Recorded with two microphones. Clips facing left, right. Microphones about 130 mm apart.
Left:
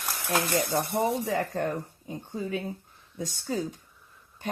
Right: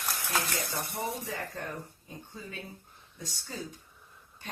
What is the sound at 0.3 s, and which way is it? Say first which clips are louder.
Speech: left 8 dB; 60° left (ahead or behind).